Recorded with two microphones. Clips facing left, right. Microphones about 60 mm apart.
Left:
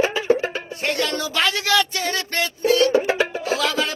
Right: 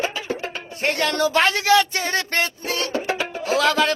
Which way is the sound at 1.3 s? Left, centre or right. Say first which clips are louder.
Right 2 dB; right.